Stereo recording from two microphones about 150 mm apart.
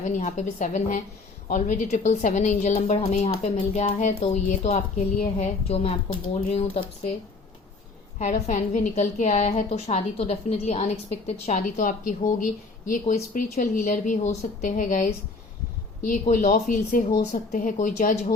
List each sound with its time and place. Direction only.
0.0 s a woman's voice: 55° left (ahead or behind)
8.2 s a woman's voice: 55° left (ahead or behind)